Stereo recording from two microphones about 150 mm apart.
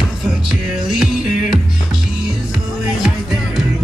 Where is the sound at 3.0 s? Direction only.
5° right (ahead or behind).